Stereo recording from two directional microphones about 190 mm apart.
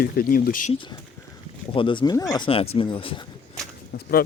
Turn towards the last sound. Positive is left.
turn(degrees=50)  # may be behind; listen again after turning